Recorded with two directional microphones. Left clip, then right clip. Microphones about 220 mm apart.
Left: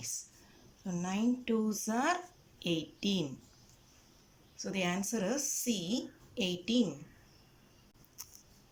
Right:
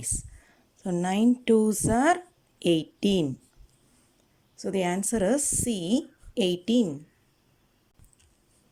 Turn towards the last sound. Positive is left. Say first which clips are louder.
# right 8 dB
turn(degrees=-30)  # may be behind; listen again after turning